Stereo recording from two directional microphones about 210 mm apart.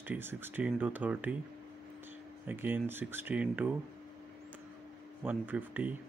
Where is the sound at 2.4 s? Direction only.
10° right (ahead or behind).